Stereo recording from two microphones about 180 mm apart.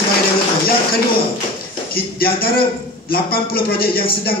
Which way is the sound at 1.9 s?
55° left (ahead or behind).